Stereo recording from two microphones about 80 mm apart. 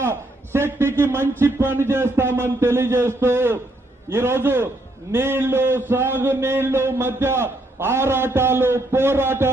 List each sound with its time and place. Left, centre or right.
0.0 s a man's voice: right